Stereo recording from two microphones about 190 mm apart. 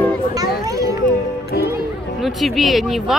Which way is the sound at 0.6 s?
15° right (ahead or behind).